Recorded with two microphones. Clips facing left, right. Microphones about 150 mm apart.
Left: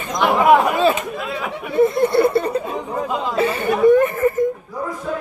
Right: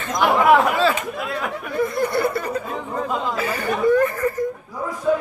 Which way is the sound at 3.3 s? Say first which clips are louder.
Left 5 dB; 25° left (ahead or behind).